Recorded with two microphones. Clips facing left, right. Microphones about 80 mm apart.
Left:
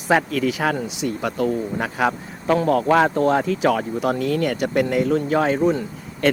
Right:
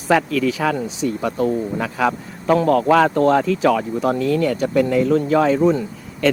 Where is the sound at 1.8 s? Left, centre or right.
Left.